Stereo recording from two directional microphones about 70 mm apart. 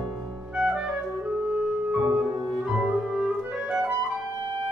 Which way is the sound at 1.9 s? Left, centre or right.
Centre.